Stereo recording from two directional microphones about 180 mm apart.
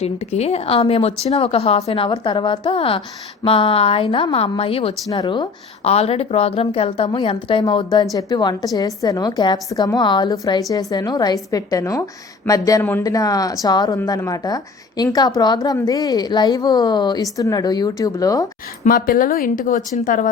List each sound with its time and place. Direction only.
0.0 s a woman's voice: 35° left (ahead or behind); by 18.4 s 20° left (ahead or behind)
18.9 s speech: 55° left (ahead or behind)